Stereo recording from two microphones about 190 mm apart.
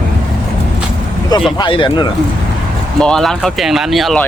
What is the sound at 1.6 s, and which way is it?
Speech, 25° left (ahead or behind).